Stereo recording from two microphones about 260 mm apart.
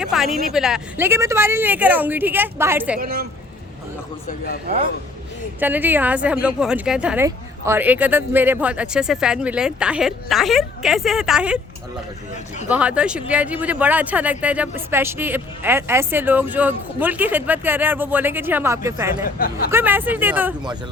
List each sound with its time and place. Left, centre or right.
0.0 s speech: centre
3.0 s a woman's voice: right
4.3 s a man's voice: left
5.5 s speech: centre
12.6 s speech: centre
19.4 s a man's voice: left
19.7 s speech: centre